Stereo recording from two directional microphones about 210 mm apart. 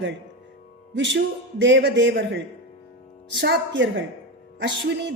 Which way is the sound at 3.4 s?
60° right (ahead or behind).